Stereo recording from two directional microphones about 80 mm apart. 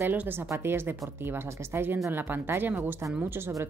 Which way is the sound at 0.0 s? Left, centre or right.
Right.